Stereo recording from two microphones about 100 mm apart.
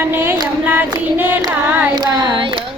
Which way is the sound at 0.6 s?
20° right (ahead or behind).